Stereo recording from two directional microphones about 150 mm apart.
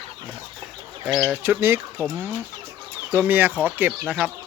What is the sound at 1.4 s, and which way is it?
Speech, 15° right (ahead or behind).